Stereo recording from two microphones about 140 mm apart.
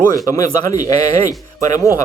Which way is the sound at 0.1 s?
25° left (ahead or behind).